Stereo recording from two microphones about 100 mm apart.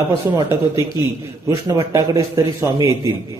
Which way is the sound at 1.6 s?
35° right (ahead or behind).